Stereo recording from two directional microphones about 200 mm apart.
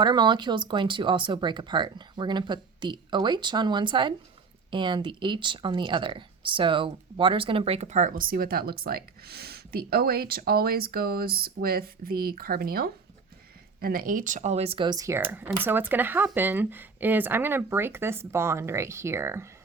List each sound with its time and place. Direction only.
0.0 s speech: 20° right (ahead or behind)